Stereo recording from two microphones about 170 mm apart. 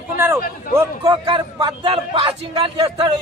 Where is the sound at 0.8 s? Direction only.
25° right (ahead or behind).